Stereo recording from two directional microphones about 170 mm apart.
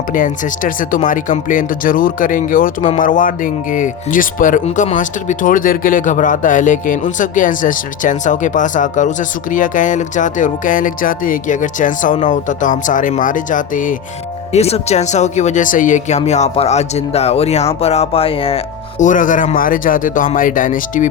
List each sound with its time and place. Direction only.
0.1 s speech: 50° left (ahead or behind)
14.5 s speech: 40° left (ahead or behind)
18.9 s speech: 50° left (ahead or behind)